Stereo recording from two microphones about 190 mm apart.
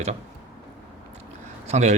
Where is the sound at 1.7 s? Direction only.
35° right (ahead or behind).